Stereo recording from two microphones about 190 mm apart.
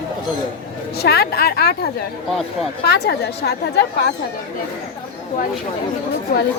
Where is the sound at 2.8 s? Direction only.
60° left (ahead or behind).